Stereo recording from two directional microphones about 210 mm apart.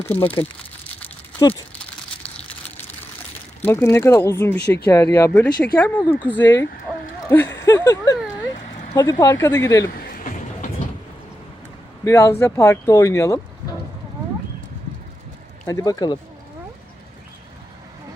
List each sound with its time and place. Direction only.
0.1 s speech: 10° left (ahead or behind)
1.4 s speech: 15° left (ahead or behind)
3.6 s speech: 10° left (ahead or behind)
9.9 s music: 45° left (ahead or behind)
12.0 s speech: 15° left (ahead or behind)
15.6 s speech: 15° left (ahead or behind)